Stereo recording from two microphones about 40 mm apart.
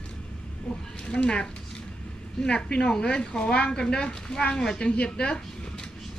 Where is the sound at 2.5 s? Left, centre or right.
Left.